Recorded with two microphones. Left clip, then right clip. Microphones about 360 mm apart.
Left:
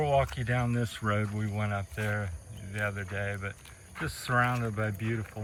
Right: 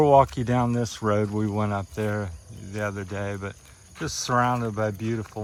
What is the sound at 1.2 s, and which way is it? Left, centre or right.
Speech, right.